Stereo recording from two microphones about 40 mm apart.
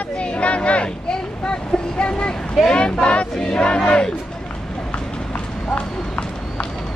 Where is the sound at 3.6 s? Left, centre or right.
Left.